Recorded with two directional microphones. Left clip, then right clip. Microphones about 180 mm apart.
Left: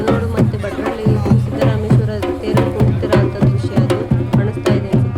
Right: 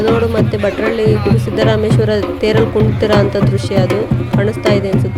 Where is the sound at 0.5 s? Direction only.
40° right (ahead or behind).